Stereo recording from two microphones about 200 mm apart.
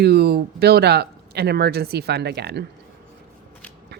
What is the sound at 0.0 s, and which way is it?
Speech, 55° right (ahead or behind).